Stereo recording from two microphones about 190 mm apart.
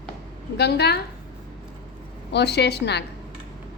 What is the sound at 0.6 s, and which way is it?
Speech, 60° left (ahead or behind).